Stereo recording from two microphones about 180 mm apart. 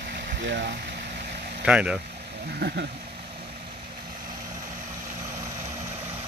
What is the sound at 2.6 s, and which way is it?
Speech, 75° right (ahead or behind).